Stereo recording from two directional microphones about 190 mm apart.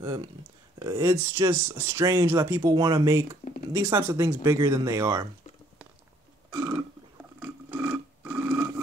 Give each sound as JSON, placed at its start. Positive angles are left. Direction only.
{"t": 0.8, "sound": "speech", "side_deg": -15}
{"t": 6.5, "sound": "burping", "side_deg": -20}
{"t": 7.3, "sound": "a sound", "side_deg": -10}